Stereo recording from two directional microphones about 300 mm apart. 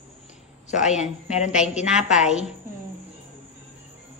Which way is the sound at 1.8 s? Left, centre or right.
Centre.